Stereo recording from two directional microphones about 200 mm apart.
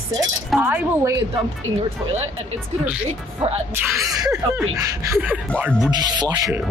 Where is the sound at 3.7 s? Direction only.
15° right (ahead or behind).